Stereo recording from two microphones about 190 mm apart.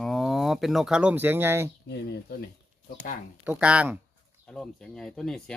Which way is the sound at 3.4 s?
5° right (ahead or behind).